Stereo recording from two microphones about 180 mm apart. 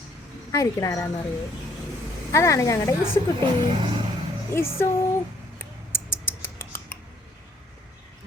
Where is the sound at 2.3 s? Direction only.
15° left (ahead or behind).